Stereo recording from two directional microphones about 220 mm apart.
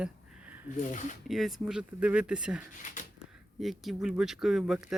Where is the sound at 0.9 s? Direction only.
35° left (ahead or behind).